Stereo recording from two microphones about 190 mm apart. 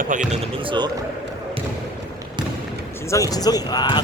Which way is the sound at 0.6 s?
25° right (ahead or behind).